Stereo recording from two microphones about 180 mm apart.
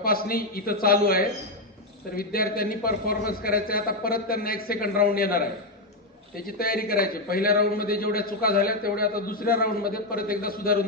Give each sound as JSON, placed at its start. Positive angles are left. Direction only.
{"t": 0.0, "sound": "a man's voice", "side_deg": 55}